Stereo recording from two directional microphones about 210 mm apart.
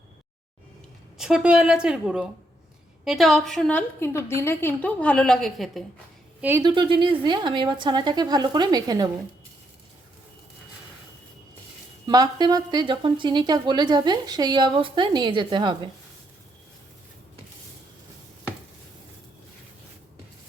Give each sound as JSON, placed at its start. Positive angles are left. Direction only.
{"t": 1.2, "sound": "a woman's voice", "side_deg": -5}
{"t": 6.6, "sound": "a woman's voice", "side_deg": -25}
{"t": 12.0, "sound": "a woman's voice", "side_deg": -20}